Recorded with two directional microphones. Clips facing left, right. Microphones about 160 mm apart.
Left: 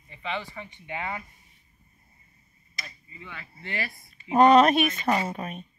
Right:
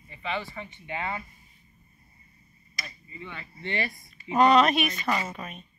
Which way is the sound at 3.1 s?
5° left (ahead or behind).